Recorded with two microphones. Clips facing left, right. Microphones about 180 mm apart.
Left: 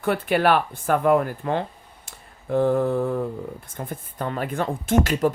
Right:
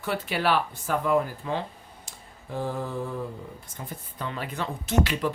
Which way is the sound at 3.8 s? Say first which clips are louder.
Left 6 dB; 50° left (ahead or behind).